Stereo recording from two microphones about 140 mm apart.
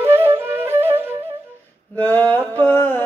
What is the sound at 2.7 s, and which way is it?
Music, 15° left (ahead or behind).